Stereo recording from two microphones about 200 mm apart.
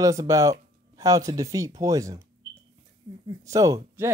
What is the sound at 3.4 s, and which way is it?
Speech, 15° right (ahead or behind).